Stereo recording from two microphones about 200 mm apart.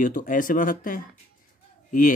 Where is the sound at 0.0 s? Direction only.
40° left (ahead or behind).